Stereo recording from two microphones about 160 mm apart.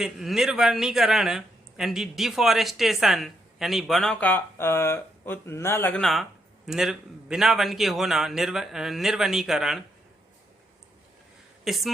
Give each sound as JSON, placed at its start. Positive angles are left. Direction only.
{"t": 0.0, "sound": "speech", "side_deg": 0}
{"t": 6.0, "sound": "speech", "side_deg": 0}
{"t": 11.6, "sound": "speech", "side_deg": 0}